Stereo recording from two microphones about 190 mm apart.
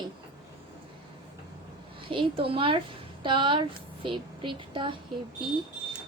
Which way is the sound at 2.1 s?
25° right (ahead or behind).